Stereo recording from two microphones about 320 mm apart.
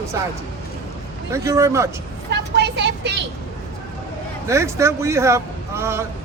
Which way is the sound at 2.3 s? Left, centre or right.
Right.